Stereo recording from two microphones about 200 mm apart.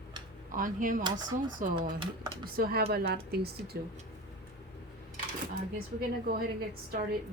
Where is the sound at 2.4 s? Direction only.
50° right (ahead or behind).